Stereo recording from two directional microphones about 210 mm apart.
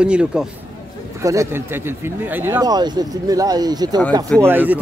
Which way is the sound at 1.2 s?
15° right (ahead or behind).